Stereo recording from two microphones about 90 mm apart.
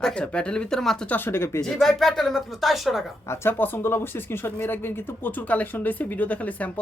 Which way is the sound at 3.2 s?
30° left (ahead or behind).